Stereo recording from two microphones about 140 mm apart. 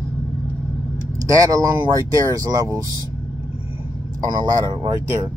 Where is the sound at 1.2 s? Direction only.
25° right (ahead or behind).